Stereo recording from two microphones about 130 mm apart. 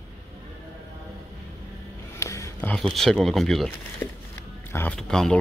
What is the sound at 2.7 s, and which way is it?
Speech, 5° left (ahead or behind).